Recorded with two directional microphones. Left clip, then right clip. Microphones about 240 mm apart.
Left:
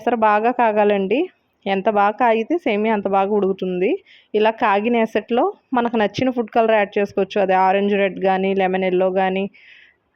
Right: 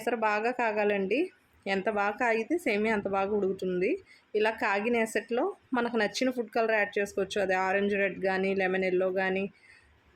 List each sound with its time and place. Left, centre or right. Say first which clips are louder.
0.0 s a woman's voice: left 12 dB; left